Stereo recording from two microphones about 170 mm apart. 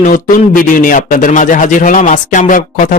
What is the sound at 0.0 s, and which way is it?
A man's voice, 50° left (ahead or behind).